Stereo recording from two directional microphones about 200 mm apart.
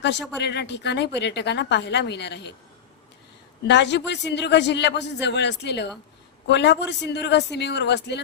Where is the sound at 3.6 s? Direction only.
60° left (ahead or behind).